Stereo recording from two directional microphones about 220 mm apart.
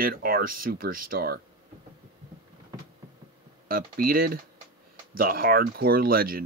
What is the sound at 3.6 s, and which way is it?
Speech, 40° right (ahead or behind).